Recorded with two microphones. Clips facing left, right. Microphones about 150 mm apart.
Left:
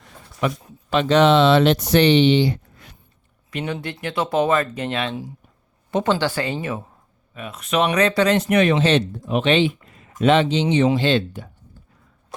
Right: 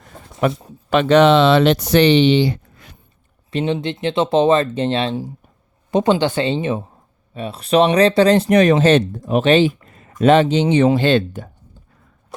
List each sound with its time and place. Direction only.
0.4 s speech: 45° right (ahead or behind)
0.9 s speech: 60° right (ahead or behind); by 2.9 s 90° right
3.5 s speech: 25° right (ahead or behind)
5.9 s speech: 20° right (ahead or behind); by 11.4 s 50° right (ahead or behind)